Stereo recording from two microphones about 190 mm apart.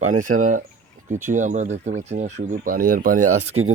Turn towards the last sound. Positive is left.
turn(degrees=-35)  # may be behind; listen again after turning